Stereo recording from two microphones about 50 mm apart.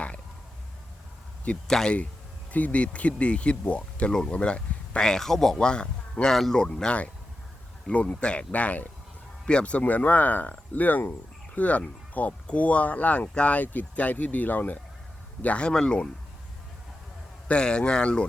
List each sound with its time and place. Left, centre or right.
1.6 s speech: centre
2.5 s a man's voice: left; by 6.7 s centre
7.9 s speech: left
15.7 s speech: centre
17.5 s speech: centre